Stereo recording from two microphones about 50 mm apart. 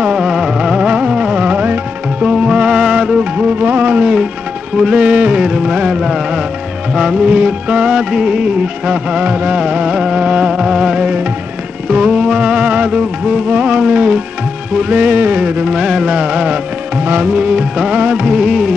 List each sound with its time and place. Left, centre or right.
0.0 s music: centre
3.6 s music: right
4.7 s music: centre
5.0 s music: right
9.2 s music: right
10.5 s music: centre
17.0 s music: right
17.3 s music: right
18.2 s music: centre